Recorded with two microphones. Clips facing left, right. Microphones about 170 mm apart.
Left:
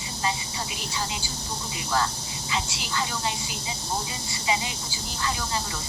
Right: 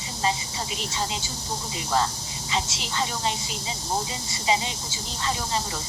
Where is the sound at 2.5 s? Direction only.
25° right (ahead or behind).